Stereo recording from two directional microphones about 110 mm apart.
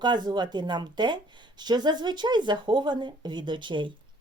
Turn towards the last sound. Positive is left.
turn(degrees=-45)  # may be behind; listen again after turning